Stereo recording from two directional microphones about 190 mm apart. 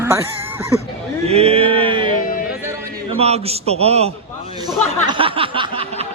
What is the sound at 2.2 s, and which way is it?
Music, 45° left (ahead or behind).